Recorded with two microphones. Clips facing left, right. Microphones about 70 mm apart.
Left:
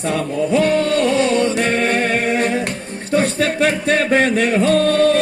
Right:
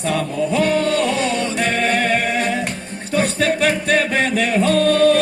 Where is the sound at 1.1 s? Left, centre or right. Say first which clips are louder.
Left 5 dB; left.